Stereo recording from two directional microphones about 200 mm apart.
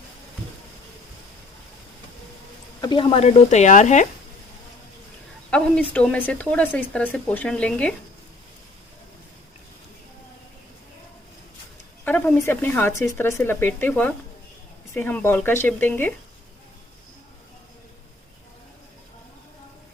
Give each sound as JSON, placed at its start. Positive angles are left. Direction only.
{"t": 2.8, "sound": "speech", "side_deg": 25}
{"t": 5.5, "sound": "a woman's voice", "side_deg": 5}
{"t": 12.0, "sound": "speech", "side_deg": 5}